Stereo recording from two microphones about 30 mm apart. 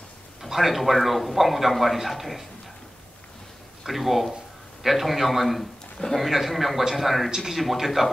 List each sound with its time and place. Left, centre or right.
0.5 s speech: centre
3.8 s speech: centre
7.2 s a man's voice: centre
7.8 s speech: centre